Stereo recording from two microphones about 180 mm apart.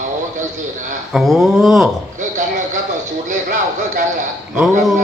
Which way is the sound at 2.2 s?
45° right (ahead or behind).